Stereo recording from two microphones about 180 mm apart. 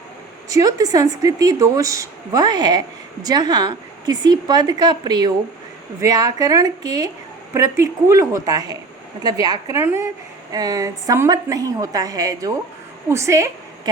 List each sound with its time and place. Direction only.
0.4 s a woman's voice: 20° right (ahead or behind)